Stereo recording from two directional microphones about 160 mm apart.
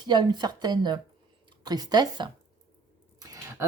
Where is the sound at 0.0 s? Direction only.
25° right (ahead or behind).